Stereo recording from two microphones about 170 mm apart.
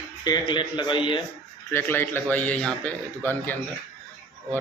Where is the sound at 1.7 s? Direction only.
15° left (ahead or behind).